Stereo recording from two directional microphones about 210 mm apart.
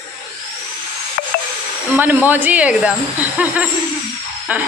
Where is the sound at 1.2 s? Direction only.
45° left (ahead or behind).